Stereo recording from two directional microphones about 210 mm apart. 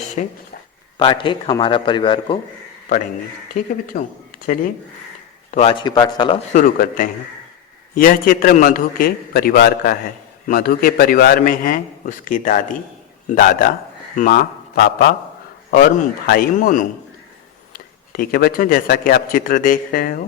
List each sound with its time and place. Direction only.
0.2 s a man's voice: 35° left (ahead or behind)
3.5 s a man's voice: 40° left (ahead or behind)
5.5 s a man's voice: 30° left (ahead or behind)
6.5 s a man's voice: 40° left (ahead or behind)